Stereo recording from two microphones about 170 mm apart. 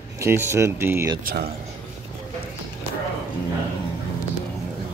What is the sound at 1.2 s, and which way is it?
Speech, 65° right (ahead or behind).